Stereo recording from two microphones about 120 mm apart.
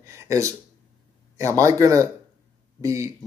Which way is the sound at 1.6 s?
25° right (ahead or behind).